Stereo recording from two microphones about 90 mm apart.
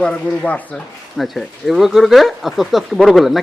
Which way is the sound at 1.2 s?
Centre (ahead or behind).